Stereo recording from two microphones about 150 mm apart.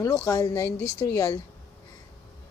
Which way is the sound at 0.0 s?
20° left (ahead or behind).